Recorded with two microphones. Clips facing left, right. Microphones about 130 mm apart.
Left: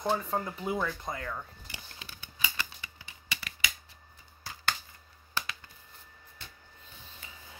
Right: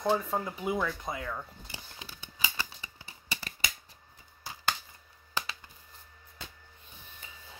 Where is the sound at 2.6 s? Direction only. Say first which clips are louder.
Right 1 dB; 30° right (ahead or behind).